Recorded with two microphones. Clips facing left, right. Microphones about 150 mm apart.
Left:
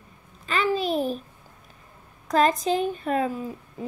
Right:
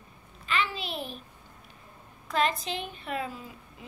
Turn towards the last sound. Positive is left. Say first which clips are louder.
# left 9 dB
turn(degrees=45)  # may be behind; listen again after turning